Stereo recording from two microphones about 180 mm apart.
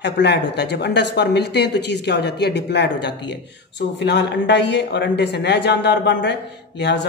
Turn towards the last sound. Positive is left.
turn(degrees=75)  # may be behind; listen again after turning